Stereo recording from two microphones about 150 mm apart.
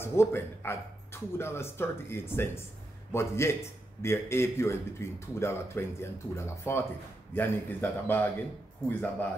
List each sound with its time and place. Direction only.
0.0 s speech: 15° left (ahead or behind)